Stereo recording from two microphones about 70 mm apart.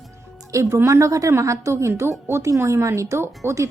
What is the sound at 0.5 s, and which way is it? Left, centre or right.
A woman's voice, right.